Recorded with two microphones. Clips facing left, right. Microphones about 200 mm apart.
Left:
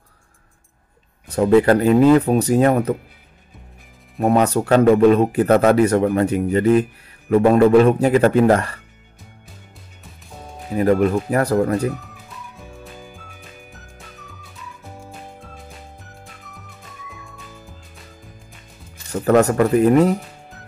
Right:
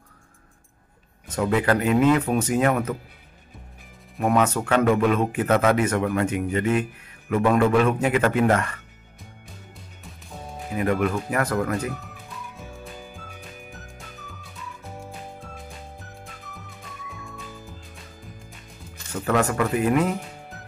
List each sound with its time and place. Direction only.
1.2 s a man's voice: 35° left (ahead or behind)
4.2 s a man's voice: 35° left (ahead or behind)
10.7 s a man's voice: 35° left (ahead or behind)
12.5 s music: centre (ahead or behind)
19.1 s a man's voice: 40° left (ahead or behind)
20.5 s music: centre (ahead or behind)